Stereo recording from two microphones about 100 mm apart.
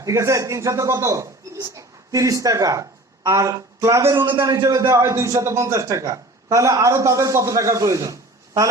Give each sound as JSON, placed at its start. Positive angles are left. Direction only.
{"t": 0.0, "sound": "a man's voice", "side_deg": -30}